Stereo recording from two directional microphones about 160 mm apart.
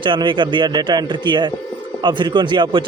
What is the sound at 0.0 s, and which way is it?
Speech, 30° right (ahead or behind).